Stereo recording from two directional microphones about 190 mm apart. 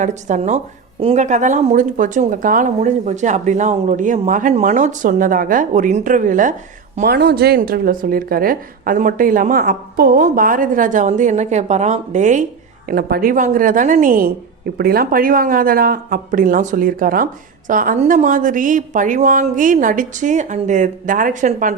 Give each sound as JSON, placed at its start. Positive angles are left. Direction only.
{"t": 0.0, "sound": "a woman's voice", "side_deg": -40}
{"t": 12.9, "sound": "a woman's voice", "side_deg": -55}